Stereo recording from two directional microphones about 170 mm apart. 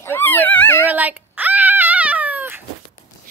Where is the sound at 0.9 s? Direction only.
10° right (ahead or behind).